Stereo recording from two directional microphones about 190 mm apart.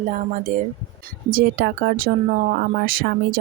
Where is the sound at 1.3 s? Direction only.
55° right (ahead or behind).